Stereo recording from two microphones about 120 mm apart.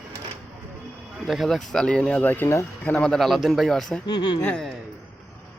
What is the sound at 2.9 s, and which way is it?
Speech, 5° left (ahead or behind).